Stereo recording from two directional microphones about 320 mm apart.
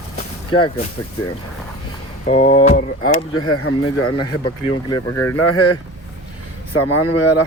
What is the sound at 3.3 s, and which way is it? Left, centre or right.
Speech, left.